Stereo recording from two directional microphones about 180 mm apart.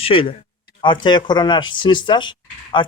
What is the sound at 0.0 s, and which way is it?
Speech, 30° left (ahead or behind).